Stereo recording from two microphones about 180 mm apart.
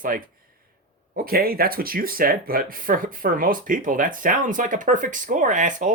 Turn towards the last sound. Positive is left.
turn(degrees=-45)  # may be behind; listen again after turning